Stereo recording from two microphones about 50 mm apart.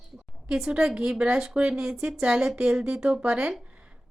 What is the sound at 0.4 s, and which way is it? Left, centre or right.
A woman's voice, centre.